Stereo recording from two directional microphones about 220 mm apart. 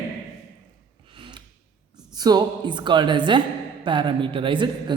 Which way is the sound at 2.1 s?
20° right (ahead or behind).